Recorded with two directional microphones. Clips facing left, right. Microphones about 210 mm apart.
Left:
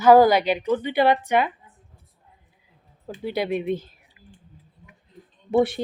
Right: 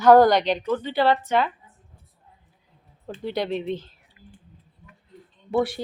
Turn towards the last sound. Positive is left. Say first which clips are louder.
# left 3 dB
turn(degrees=20)  # may be behind; listen again after turning